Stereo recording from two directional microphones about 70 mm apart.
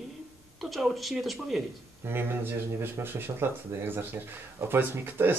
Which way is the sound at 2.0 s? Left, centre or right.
Right.